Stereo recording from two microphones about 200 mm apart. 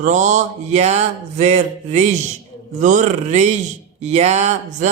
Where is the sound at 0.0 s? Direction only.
40° right (ahead or behind).